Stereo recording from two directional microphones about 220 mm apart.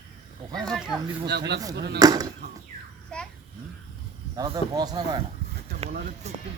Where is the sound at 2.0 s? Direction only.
15° right (ahead or behind).